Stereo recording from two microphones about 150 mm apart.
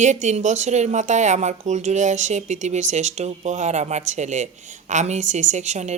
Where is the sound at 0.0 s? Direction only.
50° right (ahead or behind).